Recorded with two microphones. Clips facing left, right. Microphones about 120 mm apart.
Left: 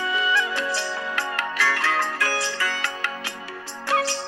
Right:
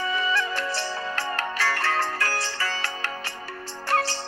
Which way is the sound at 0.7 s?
15° left (ahead or behind).